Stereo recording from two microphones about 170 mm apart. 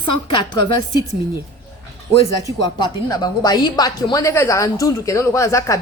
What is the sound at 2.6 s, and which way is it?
A woman's voice, 25° left (ahead or behind).